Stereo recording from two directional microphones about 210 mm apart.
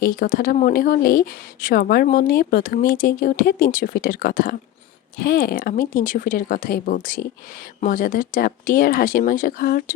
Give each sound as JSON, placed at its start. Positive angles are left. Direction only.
{"t": 0.0, "sound": "speech", "side_deg": 40}